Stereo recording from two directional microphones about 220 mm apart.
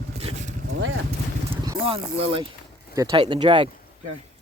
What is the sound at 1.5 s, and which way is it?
Clip-clop, 20° right (ahead or behind).